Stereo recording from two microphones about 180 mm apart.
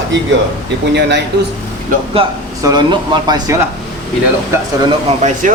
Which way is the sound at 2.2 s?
30° right (ahead or behind).